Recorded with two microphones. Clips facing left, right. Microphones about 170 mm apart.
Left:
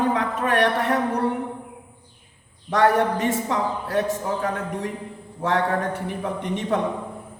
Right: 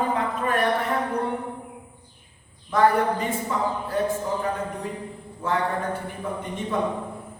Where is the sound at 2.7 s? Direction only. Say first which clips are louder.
Left 1 dB; 75° left (ahead or behind).